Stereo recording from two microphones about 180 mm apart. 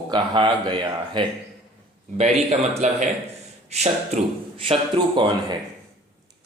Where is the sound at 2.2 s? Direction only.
35° right (ahead or behind).